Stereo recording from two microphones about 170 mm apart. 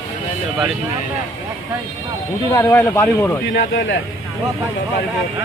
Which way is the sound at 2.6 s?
10° left (ahead or behind).